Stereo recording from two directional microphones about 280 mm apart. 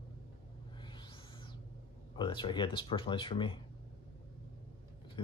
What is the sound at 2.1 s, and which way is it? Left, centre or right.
Speech, centre.